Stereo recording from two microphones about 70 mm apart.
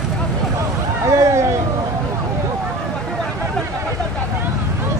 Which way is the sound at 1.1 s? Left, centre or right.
Right.